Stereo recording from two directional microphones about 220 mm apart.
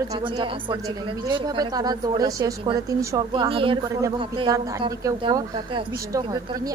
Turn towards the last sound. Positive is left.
turn(degrees=-15)  # may be behind; listen again after turning